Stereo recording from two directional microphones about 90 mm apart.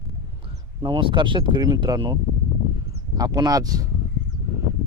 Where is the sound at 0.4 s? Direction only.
65° right (ahead or behind).